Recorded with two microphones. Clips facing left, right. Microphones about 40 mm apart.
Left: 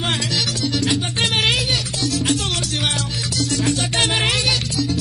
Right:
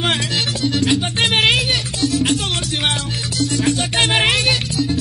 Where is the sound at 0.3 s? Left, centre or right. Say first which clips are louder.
Right 2 dB; right.